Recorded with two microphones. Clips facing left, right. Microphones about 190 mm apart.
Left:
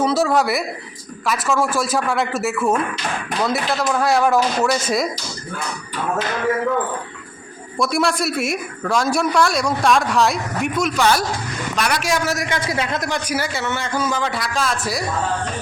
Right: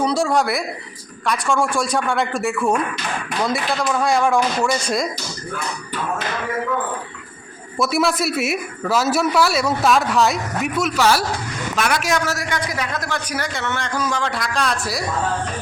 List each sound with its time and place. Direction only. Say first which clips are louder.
0.0 s a sound: left 1 dB; 5° left (ahead or behind)
1.2 s a man's voice: even; 5° left (ahead or behind)
7.8 s a man's voice: even; centre (ahead or behind)
12.2 s a man's voice: left 2 dB; 20° left (ahead or behind)
13.3 s a man's voice: left 2 dB; 5° left (ahead or behind)